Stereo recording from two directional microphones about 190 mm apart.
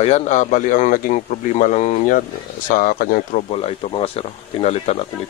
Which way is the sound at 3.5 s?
30° left (ahead or behind).